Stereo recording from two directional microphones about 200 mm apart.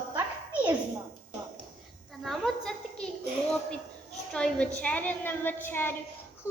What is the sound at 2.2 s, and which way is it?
Speech, centre (ahead or behind).